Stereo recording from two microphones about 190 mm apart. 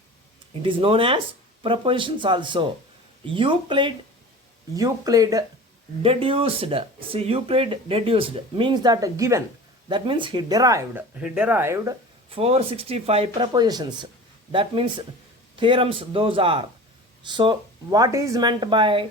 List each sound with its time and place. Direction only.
0.6 s speech: 30° right (ahead or behind)
6.0 s speech: 30° right (ahead or behind); by 11.9 s 15° right (ahead or behind)
12.3 s speech: 30° right (ahead or behind)